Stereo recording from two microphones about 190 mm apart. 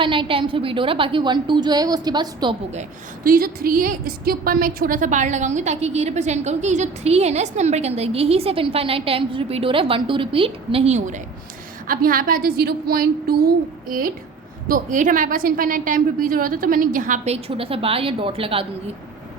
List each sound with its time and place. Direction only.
0.0 s a woman's voice: 25° right (ahead or behind)
3.2 s a woman's voice: 50° right (ahead or behind)
14.7 s a woman's voice: 45° right (ahead or behind)